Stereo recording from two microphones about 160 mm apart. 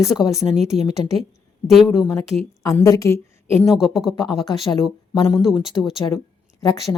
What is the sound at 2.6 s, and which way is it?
A woman's voice, 20° left (ahead or behind).